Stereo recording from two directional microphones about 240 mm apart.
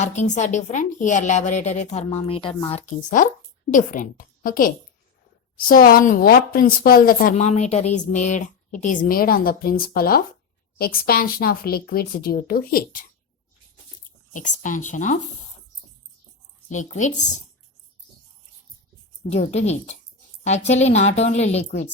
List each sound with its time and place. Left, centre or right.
0.0 s a woman's voice: left
14.3 s a woman's voice: left
16.6 s a woman's voice: left
19.3 s a woman's voice: left